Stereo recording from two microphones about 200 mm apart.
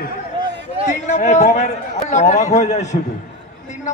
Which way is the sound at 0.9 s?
35° left (ahead or behind).